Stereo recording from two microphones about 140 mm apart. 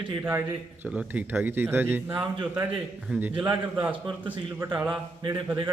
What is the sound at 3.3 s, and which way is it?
Speech, 30° right (ahead or behind).